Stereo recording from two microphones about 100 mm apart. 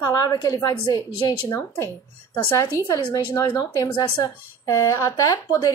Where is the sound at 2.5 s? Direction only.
35° left (ahead or behind).